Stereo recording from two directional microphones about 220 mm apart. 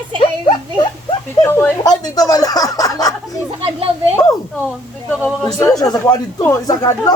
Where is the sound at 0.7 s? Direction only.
20° left (ahead or behind).